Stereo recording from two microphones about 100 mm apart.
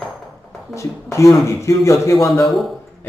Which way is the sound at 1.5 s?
30° left (ahead or behind).